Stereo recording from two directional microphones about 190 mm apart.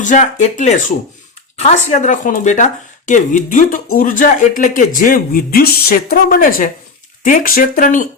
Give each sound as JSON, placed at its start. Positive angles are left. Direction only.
{"t": 0.0, "sound": "speech", "side_deg": 40}